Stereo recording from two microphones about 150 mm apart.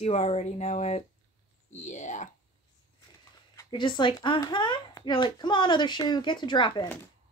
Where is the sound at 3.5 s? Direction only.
25° left (ahead or behind).